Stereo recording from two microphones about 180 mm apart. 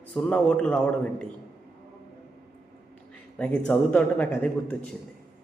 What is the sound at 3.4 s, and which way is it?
Speech, 5° left (ahead or behind).